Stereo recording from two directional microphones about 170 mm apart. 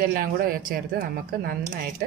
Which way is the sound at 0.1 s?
60° right (ahead or behind).